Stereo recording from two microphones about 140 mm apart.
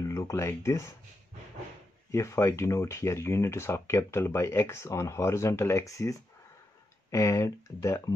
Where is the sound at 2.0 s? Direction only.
20° left (ahead or behind).